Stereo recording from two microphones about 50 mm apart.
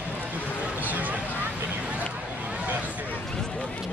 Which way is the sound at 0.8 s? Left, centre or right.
Right.